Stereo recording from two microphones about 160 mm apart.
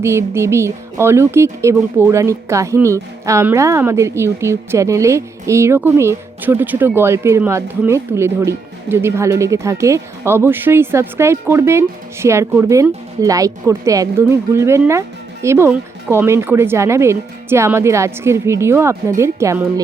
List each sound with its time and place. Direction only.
0.0 s a woman's voice: 15° right (ahead or behind)